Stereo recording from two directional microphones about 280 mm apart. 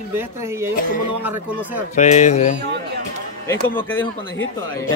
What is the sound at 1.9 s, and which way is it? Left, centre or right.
Speech, left.